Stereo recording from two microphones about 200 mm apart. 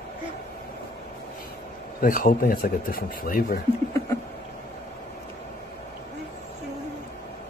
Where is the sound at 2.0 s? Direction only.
45° left (ahead or behind).